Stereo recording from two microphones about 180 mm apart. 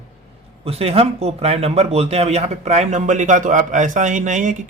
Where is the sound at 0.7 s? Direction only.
35° right (ahead or behind).